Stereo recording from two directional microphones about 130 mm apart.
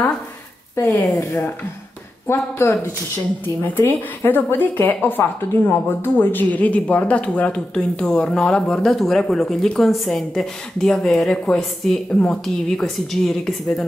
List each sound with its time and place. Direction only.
0.7 s speech: 25° left (ahead or behind); by 13.8 s centre (ahead or behind)